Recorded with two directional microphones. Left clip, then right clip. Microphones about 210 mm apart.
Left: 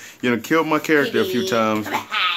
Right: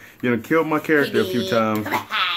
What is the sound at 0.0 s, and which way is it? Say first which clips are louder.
Speech: left 1 dB; 5° left (ahead or behind).